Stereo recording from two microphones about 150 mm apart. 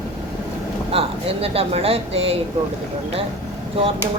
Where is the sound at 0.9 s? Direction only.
40° right (ahead or behind).